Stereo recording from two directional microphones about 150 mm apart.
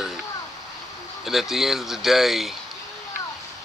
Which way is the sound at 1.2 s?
Centre (ahead or behind).